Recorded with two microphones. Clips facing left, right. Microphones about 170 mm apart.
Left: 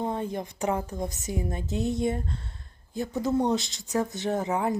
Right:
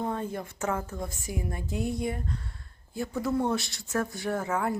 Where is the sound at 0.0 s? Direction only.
15° left (ahead or behind).